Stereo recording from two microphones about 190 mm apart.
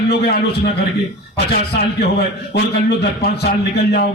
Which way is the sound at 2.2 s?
60° left (ahead or behind).